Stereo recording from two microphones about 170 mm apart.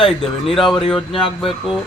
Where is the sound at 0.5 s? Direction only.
Centre (ahead or behind).